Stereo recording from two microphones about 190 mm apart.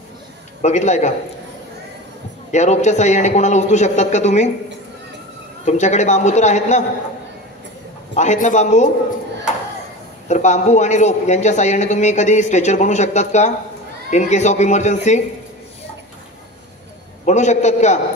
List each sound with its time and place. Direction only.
0.6 s a man's voice: 35° left (ahead or behind)
2.5 s a man's voice: 35° left (ahead or behind)
5.7 s a man's voice: 40° left (ahead or behind)
8.1 s a man's voice: 40° left (ahead or behind)
10.2 s a man's voice: 40° left (ahead or behind)
17.2 s a man's voice: 40° left (ahead or behind)